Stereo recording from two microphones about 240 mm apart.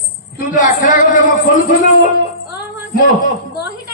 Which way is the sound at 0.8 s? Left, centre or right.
Left.